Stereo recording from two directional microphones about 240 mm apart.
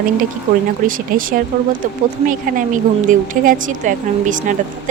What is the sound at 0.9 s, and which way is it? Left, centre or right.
A woman's voice, right.